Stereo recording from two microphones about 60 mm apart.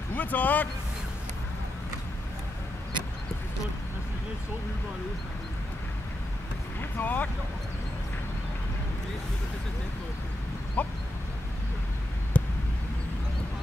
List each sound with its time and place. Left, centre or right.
0.1 s speech: left
6.8 s speech: left
10.8 s a sound: left
12.3 s basketball bounce: left